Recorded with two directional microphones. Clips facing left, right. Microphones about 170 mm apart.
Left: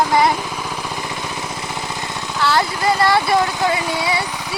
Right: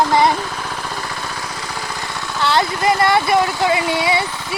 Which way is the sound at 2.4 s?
20° right (ahead or behind).